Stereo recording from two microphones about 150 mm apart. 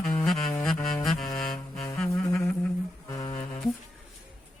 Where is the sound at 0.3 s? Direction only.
Centre (ahead or behind).